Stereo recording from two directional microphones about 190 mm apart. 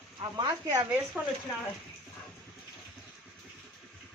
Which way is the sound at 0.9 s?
5° right (ahead or behind).